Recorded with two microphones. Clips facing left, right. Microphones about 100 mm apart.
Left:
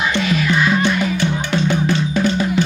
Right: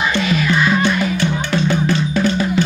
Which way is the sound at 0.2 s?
Centre (ahead or behind).